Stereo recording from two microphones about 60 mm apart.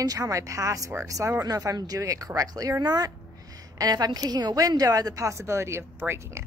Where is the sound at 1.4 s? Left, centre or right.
Right.